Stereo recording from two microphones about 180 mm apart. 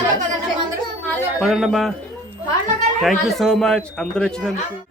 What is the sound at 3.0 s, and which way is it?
Speech, centre (ahead or behind).